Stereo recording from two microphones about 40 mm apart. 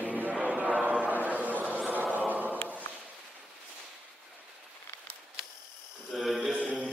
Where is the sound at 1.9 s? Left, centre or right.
Right.